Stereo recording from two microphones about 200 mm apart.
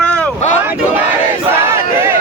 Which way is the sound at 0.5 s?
10° right (ahead or behind).